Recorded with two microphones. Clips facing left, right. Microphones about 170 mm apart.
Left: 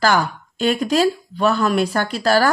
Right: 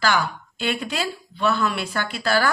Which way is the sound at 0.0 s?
40° left (ahead or behind).